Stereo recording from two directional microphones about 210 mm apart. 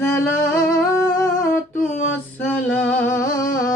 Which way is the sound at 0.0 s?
15° left (ahead or behind).